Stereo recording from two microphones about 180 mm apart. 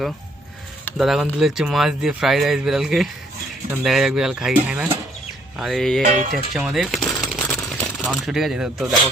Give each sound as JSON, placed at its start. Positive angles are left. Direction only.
{"t": 0.9, "sound": "speech", "side_deg": 0}
{"t": 6.0, "sound": "speech", "side_deg": -45}
{"t": 6.5, "sound": "coin", "side_deg": -5}
{"t": 8.0, "sound": "speech", "side_deg": -5}